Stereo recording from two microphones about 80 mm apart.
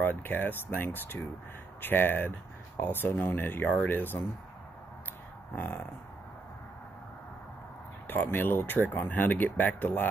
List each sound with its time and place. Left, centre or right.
0.0 s speech: left
5.5 s speech: left
8.1 s speech: left